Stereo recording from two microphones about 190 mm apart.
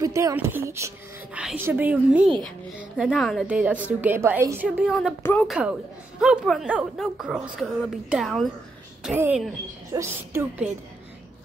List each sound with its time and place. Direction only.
0.0 s a woman's voice: 15° right (ahead or behind); by 5.1 s centre (ahead or behind)
5.2 s speech: 10° left (ahead or behind)
5.5 s a woman's voice: 5° right (ahead or behind)